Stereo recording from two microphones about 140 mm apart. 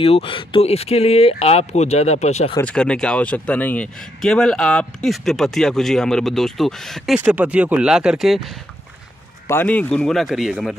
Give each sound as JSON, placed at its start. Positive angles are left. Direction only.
{"t": 0.0, "sound": "speech", "side_deg": 40}
{"t": 2.6, "sound": "a man's voice", "side_deg": 5}
{"t": 7.2, "sound": "speech", "side_deg": -10}
{"t": 9.5, "sound": "a man's voice", "side_deg": 15}